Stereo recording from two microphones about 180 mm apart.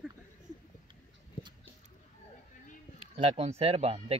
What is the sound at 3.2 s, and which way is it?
Speech, 35° right (ahead or behind).